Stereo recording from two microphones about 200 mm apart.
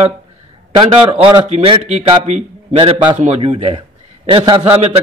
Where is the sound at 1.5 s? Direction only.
35° right (ahead or behind).